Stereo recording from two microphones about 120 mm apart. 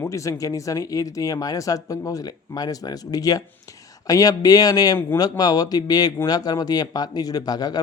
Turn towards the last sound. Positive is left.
turn(degrees=35)  # may be behind; listen again after turning